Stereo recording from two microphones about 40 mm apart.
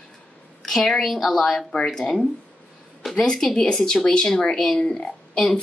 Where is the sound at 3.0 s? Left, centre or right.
Centre.